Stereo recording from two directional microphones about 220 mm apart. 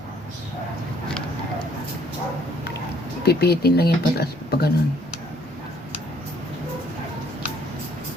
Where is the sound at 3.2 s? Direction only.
45° left (ahead or behind).